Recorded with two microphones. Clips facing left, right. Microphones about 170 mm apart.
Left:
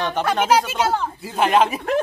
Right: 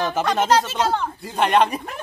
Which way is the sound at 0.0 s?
Centre (ahead or behind).